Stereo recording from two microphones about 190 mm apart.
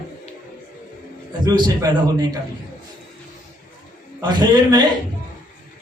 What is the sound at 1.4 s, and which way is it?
Speech, 20° right (ahead or behind).